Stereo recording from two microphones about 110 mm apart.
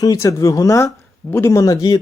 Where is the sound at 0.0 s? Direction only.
30° left (ahead or behind).